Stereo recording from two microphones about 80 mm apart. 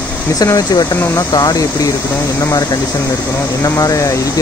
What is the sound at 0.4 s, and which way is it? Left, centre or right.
Speech, left.